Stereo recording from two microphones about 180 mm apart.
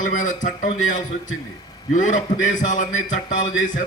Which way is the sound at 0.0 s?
45° left (ahead or behind).